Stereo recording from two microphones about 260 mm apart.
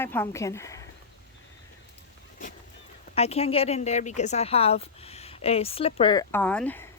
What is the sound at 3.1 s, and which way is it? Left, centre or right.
Speech, left.